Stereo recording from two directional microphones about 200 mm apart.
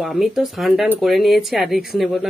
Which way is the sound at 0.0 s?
Centre (ahead or behind).